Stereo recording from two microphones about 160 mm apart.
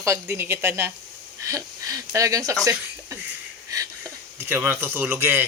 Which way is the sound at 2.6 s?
15° right (ahead or behind).